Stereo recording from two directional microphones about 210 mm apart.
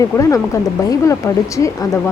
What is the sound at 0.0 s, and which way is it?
Speech, 15° left (ahead or behind).